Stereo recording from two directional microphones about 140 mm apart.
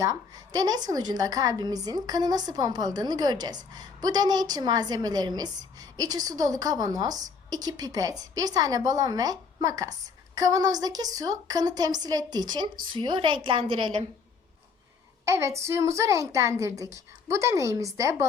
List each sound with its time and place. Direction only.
0.0 s a woman's voice: 25° right (ahead or behind)
15.2 s a woman's voice: 20° right (ahead or behind)